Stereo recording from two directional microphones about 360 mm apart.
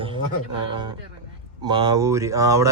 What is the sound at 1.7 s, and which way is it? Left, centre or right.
Speech, centre.